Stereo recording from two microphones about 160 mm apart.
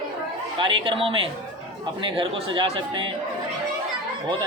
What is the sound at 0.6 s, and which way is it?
Speech, 30° right (ahead or behind).